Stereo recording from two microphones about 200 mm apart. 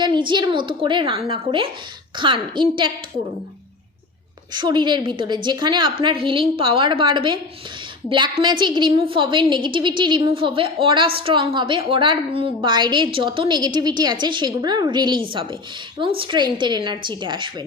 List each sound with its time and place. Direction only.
0.0 s a woman's voice: 25° right (ahead or behind)
4.5 s a woman's voice: 20° right (ahead or behind)